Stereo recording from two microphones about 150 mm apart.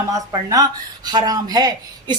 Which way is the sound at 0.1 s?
25° right (ahead or behind).